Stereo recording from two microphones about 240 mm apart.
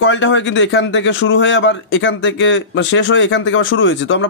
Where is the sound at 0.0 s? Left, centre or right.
Left.